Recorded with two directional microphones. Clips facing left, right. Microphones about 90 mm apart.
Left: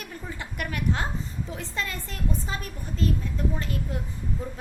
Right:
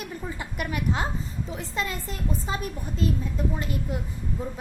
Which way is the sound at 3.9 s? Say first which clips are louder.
Right 2 dB; 10° right (ahead or behind).